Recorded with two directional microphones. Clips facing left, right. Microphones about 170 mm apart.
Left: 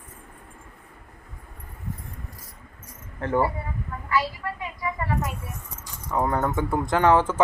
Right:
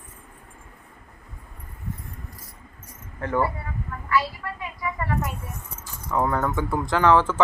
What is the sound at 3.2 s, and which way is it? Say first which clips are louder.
Speech: left 1 dB; 25° left (ahead or behind).